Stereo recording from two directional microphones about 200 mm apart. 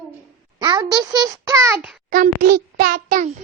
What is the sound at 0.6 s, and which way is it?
A child's voice, 20° right (ahead or behind).